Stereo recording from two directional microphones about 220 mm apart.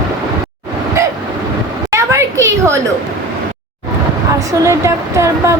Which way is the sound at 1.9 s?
15° right (ahead or behind).